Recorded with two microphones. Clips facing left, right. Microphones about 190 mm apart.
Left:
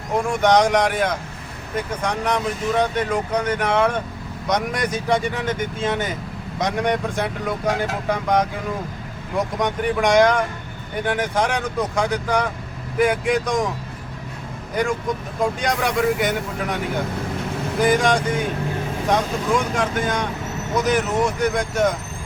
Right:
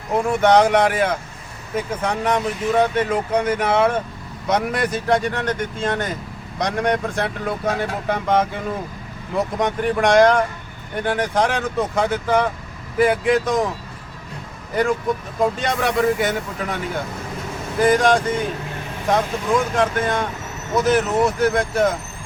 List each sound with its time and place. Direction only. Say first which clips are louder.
0.3 s speech: right 2 dB; 5° right (ahead or behind)
15.4 s speech: right 1 dB; centre (ahead or behind)
17.7 s speech: right 2 dB; centre (ahead or behind)